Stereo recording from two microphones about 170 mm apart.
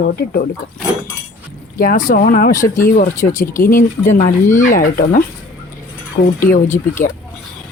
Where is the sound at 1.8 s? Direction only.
55° left (ahead or behind).